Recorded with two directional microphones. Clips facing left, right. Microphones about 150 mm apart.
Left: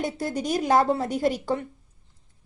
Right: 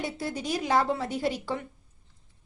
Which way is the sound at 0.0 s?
45° left (ahead or behind).